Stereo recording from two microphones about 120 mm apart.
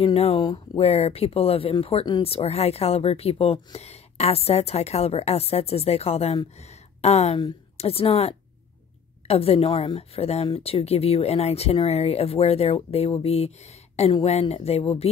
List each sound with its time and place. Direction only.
0.1 s a woman's voice: 55° left (ahead or behind)
9.9 s a woman's voice: 60° left (ahead or behind)